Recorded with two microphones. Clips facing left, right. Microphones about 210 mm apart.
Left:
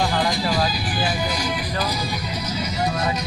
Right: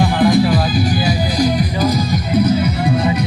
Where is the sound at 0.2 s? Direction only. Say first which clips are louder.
Right 11 dB; 55° right (ahead or behind).